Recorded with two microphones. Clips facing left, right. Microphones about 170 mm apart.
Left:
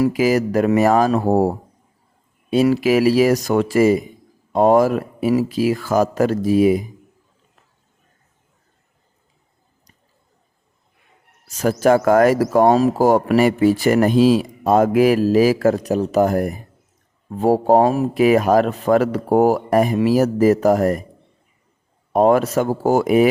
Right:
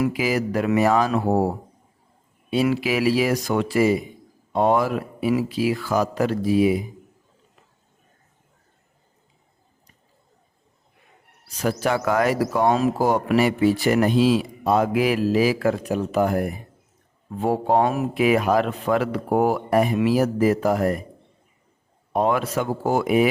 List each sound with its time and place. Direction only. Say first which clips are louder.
0.0 s speech: left 6 dB; 40° left (ahead or behind)
11.4 s speech: left 7 dB; 45° left (ahead or behind)
22.1 s speech: left 7 dB; 45° left (ahead or behind)